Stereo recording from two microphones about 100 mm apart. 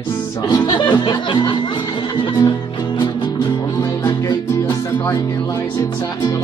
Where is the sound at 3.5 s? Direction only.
35° left (ahead or behind).